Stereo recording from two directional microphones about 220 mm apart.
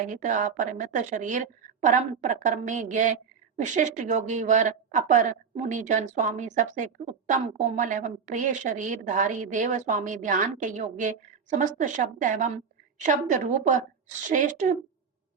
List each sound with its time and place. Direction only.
0.1 s a woman's voice: 35° right (ahead or behind)